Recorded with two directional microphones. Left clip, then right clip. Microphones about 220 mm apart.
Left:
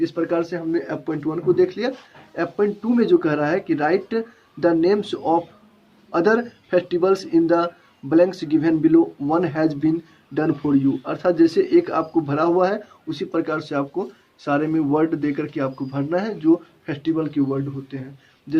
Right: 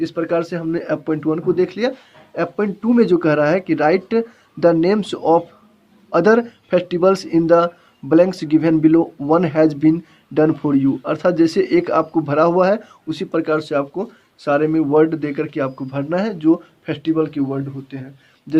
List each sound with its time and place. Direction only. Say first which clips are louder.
0.0 s speech: right 2 dB; 40° right (ahead or behind)